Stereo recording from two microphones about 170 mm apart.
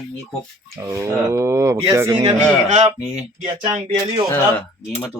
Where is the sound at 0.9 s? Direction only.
15° right (ahead or behind).